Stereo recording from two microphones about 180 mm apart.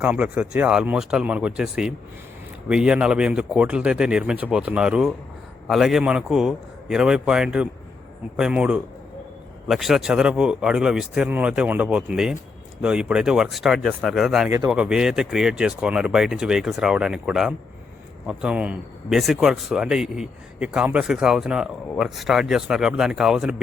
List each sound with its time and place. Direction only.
0.0 s speech: 5° right (ahead or behind)